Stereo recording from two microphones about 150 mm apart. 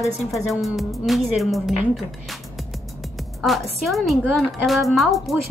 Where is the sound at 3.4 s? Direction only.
Centre (ahead or behind).